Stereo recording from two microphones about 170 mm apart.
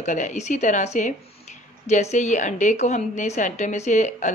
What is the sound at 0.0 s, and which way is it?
A woman's voice, 45° left (ahead or behind).